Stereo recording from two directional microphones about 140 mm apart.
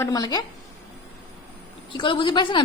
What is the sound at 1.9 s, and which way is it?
Speech, 35° left (ahead or behind).